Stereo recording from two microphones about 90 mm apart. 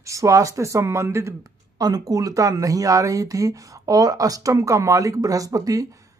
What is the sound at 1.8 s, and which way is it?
Speech, 45° right (ahead or behind).